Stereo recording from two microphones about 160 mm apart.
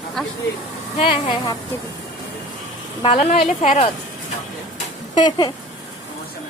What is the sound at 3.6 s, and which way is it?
Speech, 45° left (ahead or behind).